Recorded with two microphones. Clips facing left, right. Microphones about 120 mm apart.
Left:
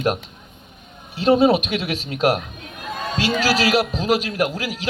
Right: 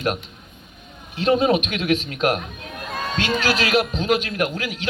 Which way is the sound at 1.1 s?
35° left (ahead or behind).